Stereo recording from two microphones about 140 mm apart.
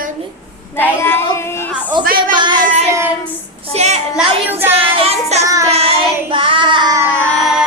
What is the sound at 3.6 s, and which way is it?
Speech, 45° right (ahead or behind).